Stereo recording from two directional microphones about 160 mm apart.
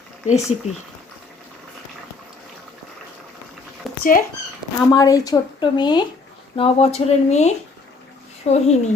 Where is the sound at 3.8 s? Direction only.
Centre (ahead or behind).